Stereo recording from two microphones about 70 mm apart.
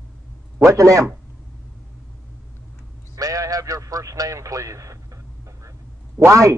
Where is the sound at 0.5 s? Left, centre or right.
Right.